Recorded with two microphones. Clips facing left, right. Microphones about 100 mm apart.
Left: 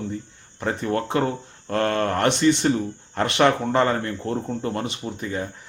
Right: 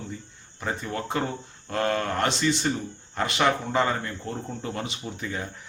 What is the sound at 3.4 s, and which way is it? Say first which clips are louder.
Speech: left 5 dB; 50° left (ahead or behind).